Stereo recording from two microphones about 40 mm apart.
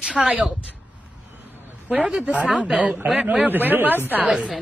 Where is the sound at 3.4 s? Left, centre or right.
Right.